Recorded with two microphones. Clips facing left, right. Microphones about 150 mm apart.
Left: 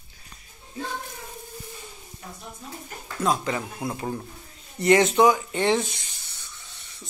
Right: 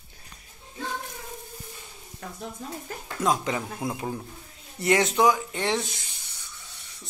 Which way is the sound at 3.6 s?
Centre (ahead or behind).